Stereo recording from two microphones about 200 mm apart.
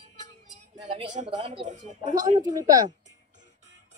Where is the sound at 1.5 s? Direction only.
35° right (ahead or behind).